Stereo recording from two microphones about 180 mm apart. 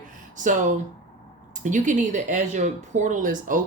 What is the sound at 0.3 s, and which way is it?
Speech, 45° right (ahead or behind).